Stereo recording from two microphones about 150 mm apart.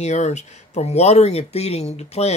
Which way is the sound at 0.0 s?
50° left (ahead or behind).